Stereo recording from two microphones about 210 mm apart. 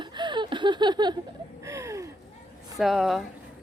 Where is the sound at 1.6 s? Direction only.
15° right (ahead or behind).